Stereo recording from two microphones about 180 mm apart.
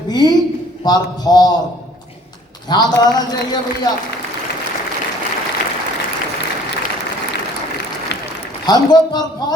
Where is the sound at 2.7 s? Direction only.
20° left (ahead or behind).